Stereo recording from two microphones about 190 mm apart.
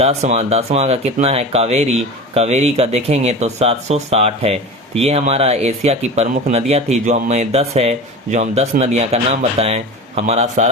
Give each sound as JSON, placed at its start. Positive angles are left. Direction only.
{"t": 0.0, "sound": "speech", "side_deg": -35}